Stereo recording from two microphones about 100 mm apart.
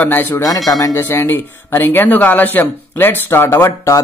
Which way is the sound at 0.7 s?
35° left (ahead or behind).